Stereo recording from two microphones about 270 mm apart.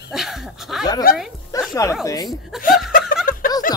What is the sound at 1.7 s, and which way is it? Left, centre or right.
Speech, centre.